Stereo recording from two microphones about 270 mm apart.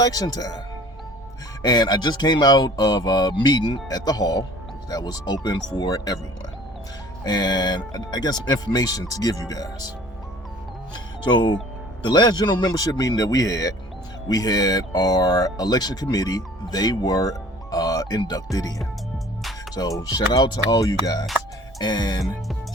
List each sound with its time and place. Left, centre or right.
0.0 s speech: centre
1.6 s speech: centre
7.3 s speech: centre
10.9 s speech: centre
20.0 s speech: centre